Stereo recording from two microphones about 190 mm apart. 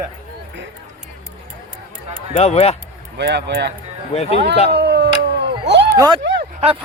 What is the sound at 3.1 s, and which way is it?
Speech, 65° right (ahead or behind).